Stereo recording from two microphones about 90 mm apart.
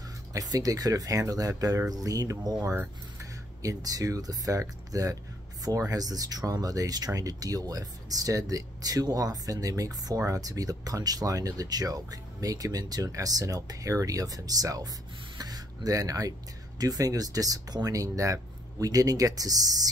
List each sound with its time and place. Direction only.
0.3 s speech: 45° right (ahead or behind)
2.6 s speech: 25° right (ahead or behind)
3.2 s speech: 40° right (ahead or behind)